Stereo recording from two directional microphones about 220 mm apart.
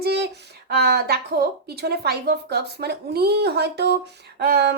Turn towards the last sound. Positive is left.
turn(degrees=-45)  # may be behind; listen again after turning